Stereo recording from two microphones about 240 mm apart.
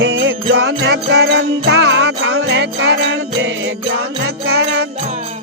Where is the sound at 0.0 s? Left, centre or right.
Right.